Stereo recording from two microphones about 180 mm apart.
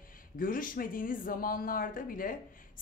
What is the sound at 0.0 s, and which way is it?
A man's voice, 50° left (ahead or behind).